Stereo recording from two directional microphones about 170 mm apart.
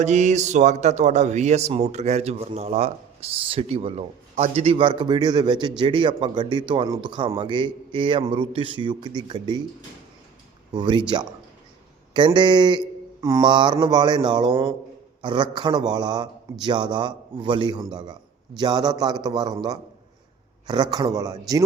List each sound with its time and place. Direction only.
0.0 s speech: 45° right (ahead or behind); by 9.6 s 25° right (ahead or behind)
10.7 s a man's voice: 25° right (ahead or behind)
12.1 s a man's voice: 30° right (ahead or behind)